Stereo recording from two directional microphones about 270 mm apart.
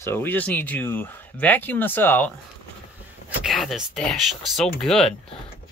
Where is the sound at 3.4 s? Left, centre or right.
Centre.